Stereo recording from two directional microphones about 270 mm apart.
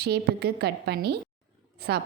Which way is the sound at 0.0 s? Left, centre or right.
Right.